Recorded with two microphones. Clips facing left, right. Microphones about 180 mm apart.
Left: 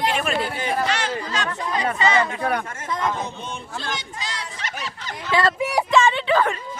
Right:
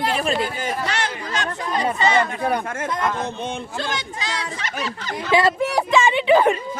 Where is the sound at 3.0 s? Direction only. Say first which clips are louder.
Even; 75° right (ahead or behind).